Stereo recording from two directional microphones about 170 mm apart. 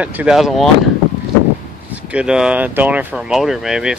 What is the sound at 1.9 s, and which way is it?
Speech, 5° right (ahead or behind).